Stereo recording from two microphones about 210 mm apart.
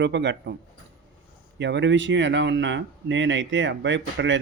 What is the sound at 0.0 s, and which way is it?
Speech, 55° right (ahead or behind).